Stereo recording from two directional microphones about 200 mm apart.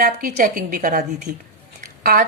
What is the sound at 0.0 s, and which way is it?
A woman's voice, 45° right (ahead or behind).